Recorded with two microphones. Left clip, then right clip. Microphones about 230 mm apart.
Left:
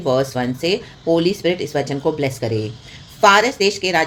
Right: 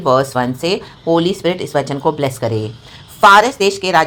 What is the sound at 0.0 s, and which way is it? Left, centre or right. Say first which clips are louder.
A woman's voice: right 5 dB; centre.